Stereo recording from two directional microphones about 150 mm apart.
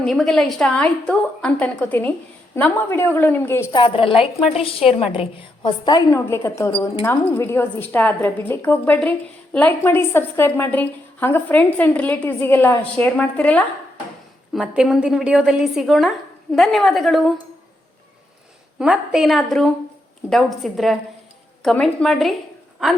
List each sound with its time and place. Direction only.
0.0 s a woman's voice: centre (ahead or behind)
3.7 s a woman's voice: 35° left (ahead or behind); by 13.7 s 10° left (ahead or behind)
14.5 s a woman's voice: 5° right (ahead or behind)
18.8 s a woman's voice: 5° right (ahead or behind)